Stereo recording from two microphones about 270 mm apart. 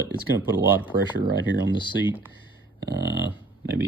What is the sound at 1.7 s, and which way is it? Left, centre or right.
Speech, centre.